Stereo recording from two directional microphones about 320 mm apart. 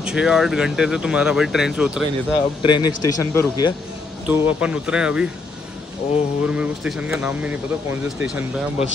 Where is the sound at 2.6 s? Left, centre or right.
Centre.